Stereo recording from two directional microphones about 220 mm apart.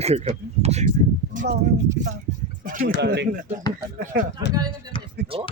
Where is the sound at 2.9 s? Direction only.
50° right (ahead or behind).